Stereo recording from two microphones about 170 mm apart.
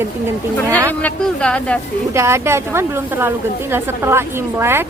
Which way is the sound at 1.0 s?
5° left (ahead or behind).